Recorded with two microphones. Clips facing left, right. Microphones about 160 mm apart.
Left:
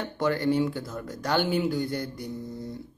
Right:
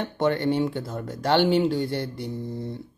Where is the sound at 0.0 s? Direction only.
25° right (ahead or behind).